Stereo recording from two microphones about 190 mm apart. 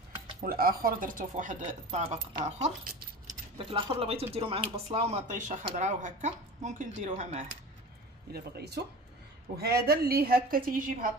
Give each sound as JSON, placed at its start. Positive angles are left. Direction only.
{"t": 0.4, "sound": "speech", "side_deg": -50}
{"t": 3.5, "sound": "speech", "side_deg": -25}
{"t": 8.3, "sound": "a man's voice", "side_deg": -60}